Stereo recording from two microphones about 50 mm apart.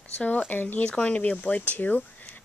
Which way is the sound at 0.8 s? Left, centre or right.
Centre.